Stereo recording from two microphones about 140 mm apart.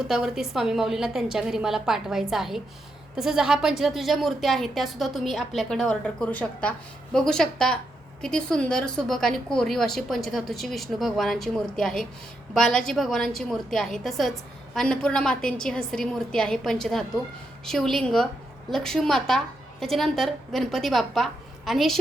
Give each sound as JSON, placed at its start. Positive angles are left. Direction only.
{"t": 0.1, "sound": "a woman's voice", "side_deg": 0}